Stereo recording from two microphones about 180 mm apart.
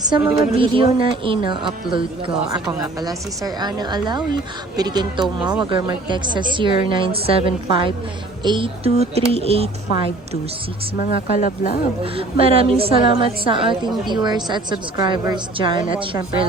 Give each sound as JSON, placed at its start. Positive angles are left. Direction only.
{"t": 0.1, "sound": "a woman's voice", "side_deg": -30}
{"t": 3.0, "sound": "a woman's voice", "side_deg": -20}
{"t": 10.9, "sound": "a woman's voice", "side_deg": 55}
{"t": 12.1, "sound": "a woman's voice", "side_deg": -30}